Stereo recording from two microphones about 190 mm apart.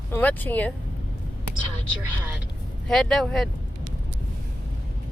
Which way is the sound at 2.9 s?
Centre (ahead or behind).